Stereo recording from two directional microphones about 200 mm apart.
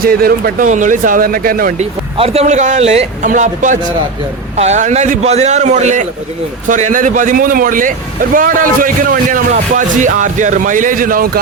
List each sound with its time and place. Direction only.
0.0 s speech: 50° right (ahead or behind)
1.8 s speech: 30° right (ahead or behind)